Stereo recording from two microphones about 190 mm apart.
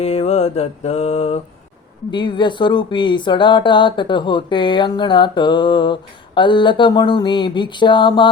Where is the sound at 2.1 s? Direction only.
25° left (ahead or behind).